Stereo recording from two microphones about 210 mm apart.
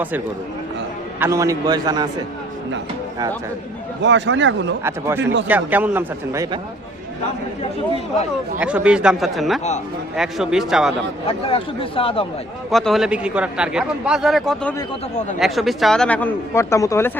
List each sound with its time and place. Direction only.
1.2 s a man's voice: 15° right (ahead or behind)
4.0 s speech: 60° right (ahead or behind)
4.8 s a man's voice: 10° right (ahead or behind)
5.2 s speech: 55° right (ahead or behind)
5.5 s a man's voice: 10° right (ahead or behind)
8.5 s a man's voice: 5° right (ahead or behind)
11.3 s speech: 25° left (ahead or behind)
12.7 s a man's voice: centre (ahead or behind)